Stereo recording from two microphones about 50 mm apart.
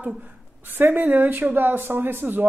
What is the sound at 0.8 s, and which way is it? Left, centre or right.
Speech, right.